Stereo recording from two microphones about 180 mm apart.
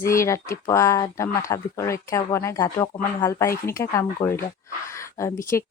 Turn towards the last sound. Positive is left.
turn(degrees=15)  # may be behind; listen again after turning